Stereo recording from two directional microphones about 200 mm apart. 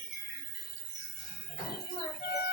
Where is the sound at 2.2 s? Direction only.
50° left (ahead or behind).